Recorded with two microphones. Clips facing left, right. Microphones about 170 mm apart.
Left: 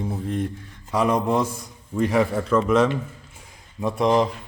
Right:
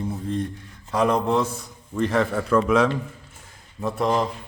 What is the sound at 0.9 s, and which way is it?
Speech, 5° left (ahead or behind).